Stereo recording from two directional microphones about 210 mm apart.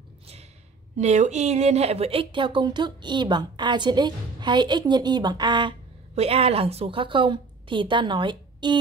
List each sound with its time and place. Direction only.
0.9 s speech: 35° right (ahead or behind)